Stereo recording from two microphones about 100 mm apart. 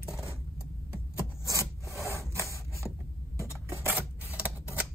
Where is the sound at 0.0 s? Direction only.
30° left (ahead or behind).